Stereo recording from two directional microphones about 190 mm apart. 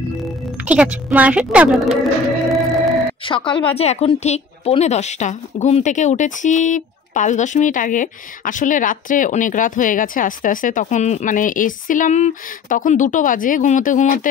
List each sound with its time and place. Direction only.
0.7 s a woman's voice: 10° right (ahead or behind)
3.3 s a woman's voice: 25° left (ahead or behind); by 14.2 s 45° left (ahead or behind)